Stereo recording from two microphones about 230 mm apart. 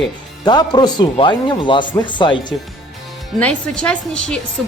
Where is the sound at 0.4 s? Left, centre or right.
Centre.